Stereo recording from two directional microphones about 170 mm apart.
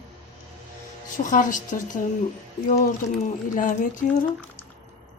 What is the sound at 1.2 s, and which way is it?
A woman's voice, 50° left (ahead or behind).